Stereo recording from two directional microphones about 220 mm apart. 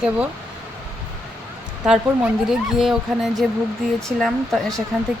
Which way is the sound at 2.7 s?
Centre (ahead or behind).